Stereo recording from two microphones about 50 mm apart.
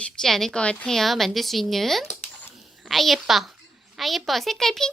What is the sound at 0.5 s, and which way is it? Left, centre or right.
Speech, left.